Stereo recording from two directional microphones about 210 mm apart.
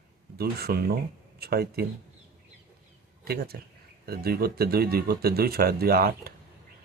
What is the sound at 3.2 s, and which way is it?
Speech, 45° right (ahead or behind).